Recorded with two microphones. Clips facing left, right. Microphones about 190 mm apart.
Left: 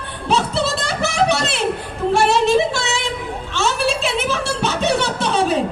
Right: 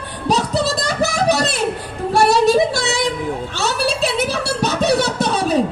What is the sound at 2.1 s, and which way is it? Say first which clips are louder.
Child singing: right 3 dB; 40° right (ahead or behind).